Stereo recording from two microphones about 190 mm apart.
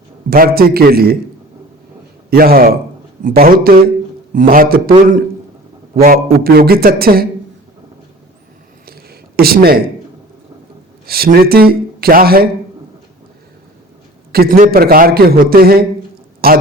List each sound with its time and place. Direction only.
0.3 s a man's voice: 50° right (ahead or behind)
2.3 s a man's voice: 50° right (ahead or behind)
8.9 s a sound: 55° right (ahead or behind)
11.0 s speech: 55° right (ahead or behind)
14.3 s a man's voice: 50° right (ahead or behind)